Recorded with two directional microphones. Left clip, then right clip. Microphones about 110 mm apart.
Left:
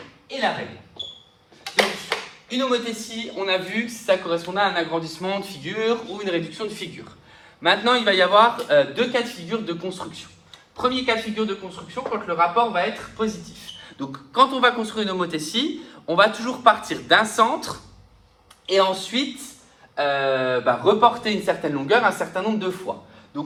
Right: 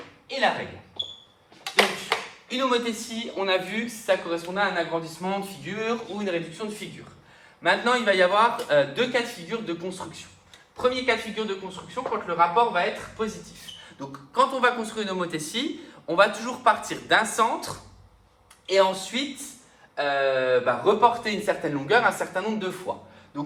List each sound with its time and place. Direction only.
1.6 s a sound: 50° right (ahead or behind)
4.0 s speech: centre (ahead or behind)
4.9 s a man's voice: 55° left (ahead or behind)
7.6 s a man's voice: 30° left (ahead or behind)
8.4 s speech: 5° left (ahead or behind)
11.7 s speech: 10° right (ahead or behind)
13.8 s a man's voice: 25° left (ahead or behind)
14.8 s speech: 10° left (ahead or behind)